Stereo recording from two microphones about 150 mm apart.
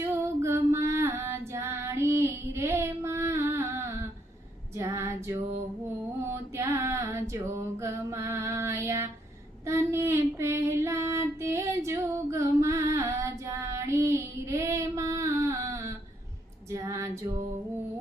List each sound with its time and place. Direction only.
0.0 s female singing: 15° right (ahead or behind)
6.2 s a sound: 20° right (ahead or behind)
9.6 s female singing: 15° right (ahead or behind)